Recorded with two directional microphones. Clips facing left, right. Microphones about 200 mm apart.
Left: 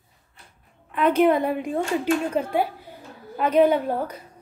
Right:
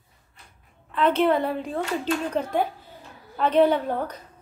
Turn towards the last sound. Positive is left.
turn(degrees=10)  # may be behind; listen again after turning